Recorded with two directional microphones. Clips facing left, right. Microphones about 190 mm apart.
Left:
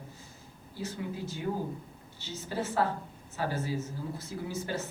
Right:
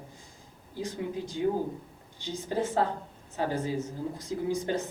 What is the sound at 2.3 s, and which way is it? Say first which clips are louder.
A man's voice: right 3 dB; 15° right (ahead or behind).